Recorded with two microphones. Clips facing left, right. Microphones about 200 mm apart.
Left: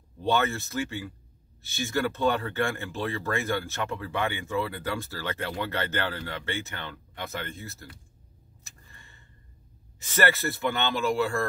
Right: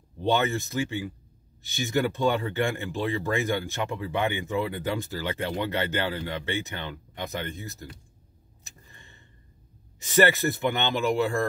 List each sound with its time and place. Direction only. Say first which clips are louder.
0.2 s speech: right 1 dB; 15° right (ahead or behind)
8.6 s a sound: right 3 dB; 20° right (ahead or behind)
9.9 s speech: right 4 dB; 15° right (ahead or behind)